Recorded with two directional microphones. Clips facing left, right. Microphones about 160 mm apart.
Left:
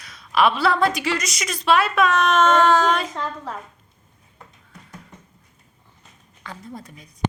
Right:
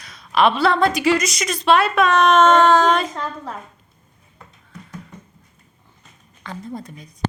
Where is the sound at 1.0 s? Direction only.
10° right (ahead or behind).